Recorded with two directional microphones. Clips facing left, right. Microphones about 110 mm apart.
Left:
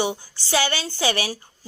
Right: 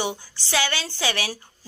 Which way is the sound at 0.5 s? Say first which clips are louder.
Left 3 dB; 40° left (ahead or behind).